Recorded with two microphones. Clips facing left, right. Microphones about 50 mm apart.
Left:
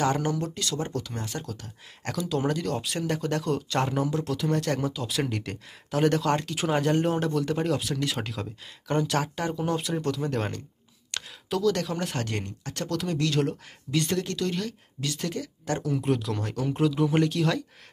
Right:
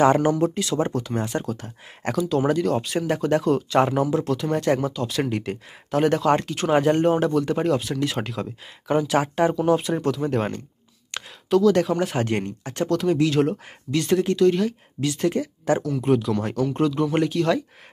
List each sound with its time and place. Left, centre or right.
0.0 s speech: right
2.1 s speech: centre
9.2 s speech: right
9.6 s speech: centre
11.1 s a sound: centre
11.5 s speech: centre
11.9 s speech: centre
12.8 s speech: centre; by 15.8 s right
15.8 s speech: centre